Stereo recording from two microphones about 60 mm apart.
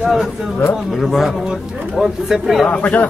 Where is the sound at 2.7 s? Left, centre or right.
Left.